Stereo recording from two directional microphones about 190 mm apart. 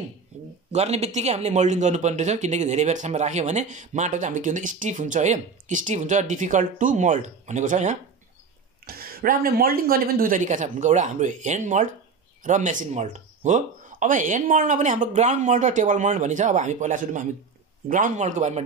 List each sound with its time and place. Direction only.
0.7 s a man's voice: 35° right (ahead or behind)
8.8 s a man's voice: 50° right (ahead or behind)